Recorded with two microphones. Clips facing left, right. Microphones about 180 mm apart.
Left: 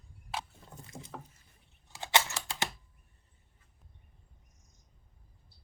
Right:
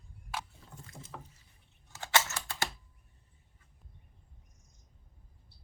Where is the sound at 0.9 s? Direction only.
20° left (ahead or behind).